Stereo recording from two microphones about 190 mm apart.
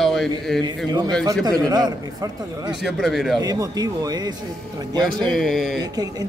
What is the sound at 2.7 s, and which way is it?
Speech, centre (ahead or behind).